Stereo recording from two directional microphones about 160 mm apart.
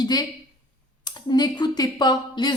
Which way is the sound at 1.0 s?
25° left (ahead or behind).